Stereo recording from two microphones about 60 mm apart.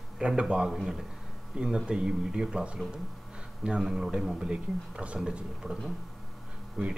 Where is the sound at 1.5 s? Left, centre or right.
Centre.